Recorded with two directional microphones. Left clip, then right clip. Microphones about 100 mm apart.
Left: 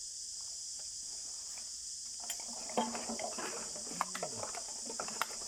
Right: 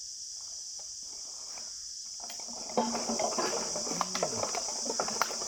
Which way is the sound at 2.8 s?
25° right (ahead or behind).